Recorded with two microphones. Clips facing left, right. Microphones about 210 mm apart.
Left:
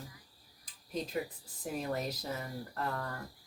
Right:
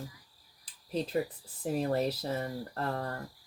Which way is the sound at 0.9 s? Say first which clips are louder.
Right 5 dB; 30° right (ahead or behind).